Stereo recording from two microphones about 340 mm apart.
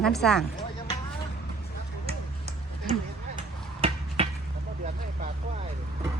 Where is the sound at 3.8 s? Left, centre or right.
Centre.